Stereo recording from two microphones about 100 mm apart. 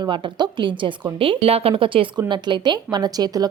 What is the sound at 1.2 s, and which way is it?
Speech, 70° right (ahead or behind).